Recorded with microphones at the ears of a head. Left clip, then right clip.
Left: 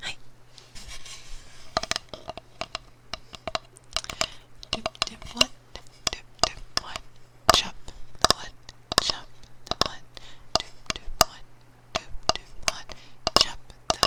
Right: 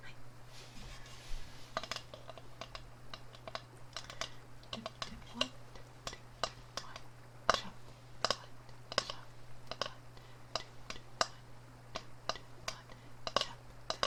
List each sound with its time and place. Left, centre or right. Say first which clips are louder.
0.0 s rub: left 18 dB; left
7.4 s whispering: left 13 dB; left
11.9 s a sound: left 15 dB; left